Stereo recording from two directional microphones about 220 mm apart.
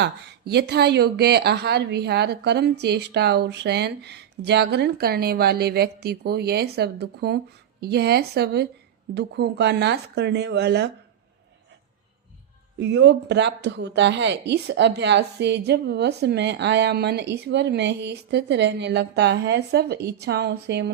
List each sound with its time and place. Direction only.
0.0 s speech: 50° right (ahead or behind)
12.8 s speech: 55° right (ahead or behind)